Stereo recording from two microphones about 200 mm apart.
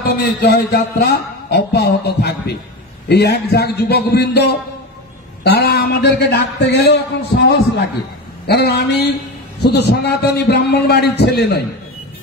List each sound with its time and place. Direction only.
0.1 s a man's voice: 50° left (ahead or behind)